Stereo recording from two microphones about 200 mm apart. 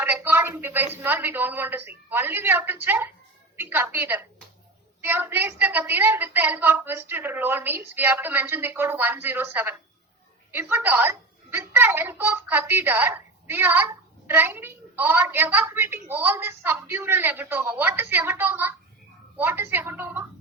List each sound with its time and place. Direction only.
0.0 s a woman's voice: 10° right (ahead or behind)